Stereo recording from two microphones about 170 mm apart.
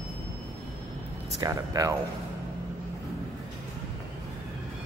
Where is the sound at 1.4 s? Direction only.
20° right (ahead or behind).